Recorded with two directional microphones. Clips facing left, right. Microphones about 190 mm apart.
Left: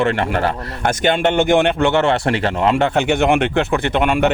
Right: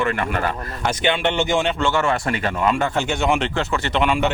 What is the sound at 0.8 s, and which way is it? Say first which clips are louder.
Speech: left 4 dB; 45° left (ahead or behind).